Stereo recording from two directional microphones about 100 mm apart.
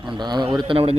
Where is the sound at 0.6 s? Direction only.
65° right (ahead or behind).